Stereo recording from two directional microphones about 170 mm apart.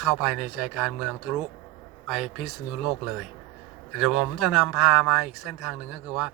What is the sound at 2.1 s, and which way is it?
Speech, centre (ahead or behind).